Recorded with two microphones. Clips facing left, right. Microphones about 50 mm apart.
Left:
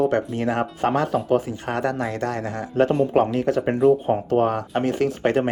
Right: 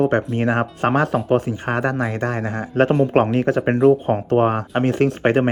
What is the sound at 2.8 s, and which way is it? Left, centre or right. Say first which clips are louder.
Speech: right 2 dB; right.